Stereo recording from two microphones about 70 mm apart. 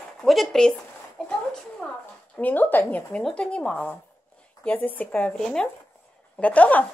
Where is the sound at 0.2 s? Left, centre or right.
Centre.